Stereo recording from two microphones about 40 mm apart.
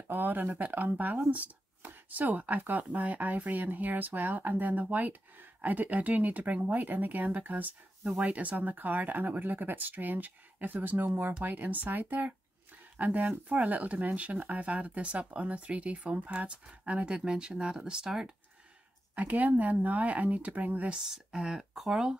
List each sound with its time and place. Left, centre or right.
0.1 s speech: right
19.1 s speech: right
21.1 s speech: centre